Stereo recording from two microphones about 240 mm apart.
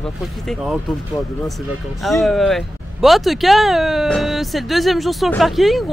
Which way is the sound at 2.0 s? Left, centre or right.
Centre.